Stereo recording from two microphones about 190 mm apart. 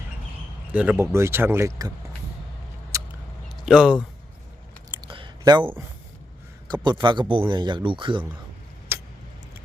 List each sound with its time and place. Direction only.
0.7 s speech: 5° right (ahead or behind)
2.9 s a sound: 15° right (ahead or behind)
3.5 s speech: 5° right (ahead or behind)
4.9 s a sound: 25° right (ahead or behind)
7.0 s speech: 25° right (ahead or behind)
8.9 s vehicle: 10° right (ahead or behind)